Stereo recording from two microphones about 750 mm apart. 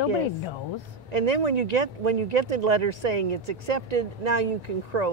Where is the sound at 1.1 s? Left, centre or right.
Right.